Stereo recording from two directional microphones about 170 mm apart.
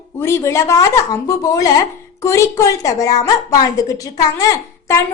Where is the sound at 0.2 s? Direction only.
15° left (ahead or behind).